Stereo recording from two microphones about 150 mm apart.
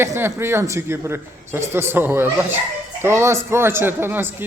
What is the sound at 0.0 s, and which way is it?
A man's voice, 15° right (ahead or behind).